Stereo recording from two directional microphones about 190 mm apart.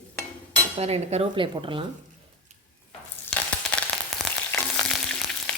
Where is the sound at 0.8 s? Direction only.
35° right (ahead or behind).